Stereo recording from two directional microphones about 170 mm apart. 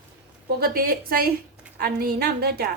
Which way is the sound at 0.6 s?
60° right (ahead or behind).